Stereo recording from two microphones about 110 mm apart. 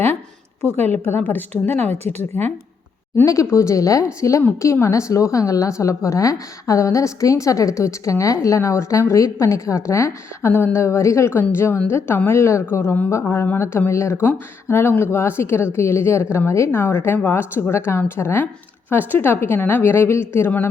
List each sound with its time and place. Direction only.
0.6 s a woman's voice: 15° left (ahead or behind)